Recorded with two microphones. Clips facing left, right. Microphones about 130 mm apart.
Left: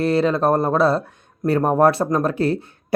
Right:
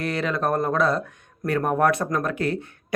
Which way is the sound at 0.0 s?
30° left (ahead or behind).